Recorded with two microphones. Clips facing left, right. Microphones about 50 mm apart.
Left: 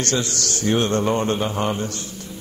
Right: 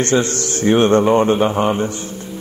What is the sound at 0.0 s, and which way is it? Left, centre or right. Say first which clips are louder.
A man's voice: right 7 dB; right.